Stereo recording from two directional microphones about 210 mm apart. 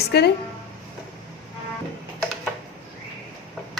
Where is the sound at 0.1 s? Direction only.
50° left (ahead or behind).